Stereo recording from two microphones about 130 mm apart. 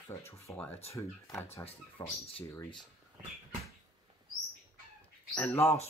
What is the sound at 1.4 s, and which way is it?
Speech, 50° left (ahead or behind).